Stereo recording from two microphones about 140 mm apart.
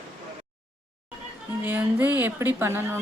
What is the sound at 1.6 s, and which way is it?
Speech, 15° right (ahead or behind).